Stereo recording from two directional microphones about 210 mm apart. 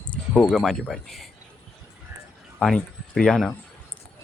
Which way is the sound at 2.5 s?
5° left (ahead or behind).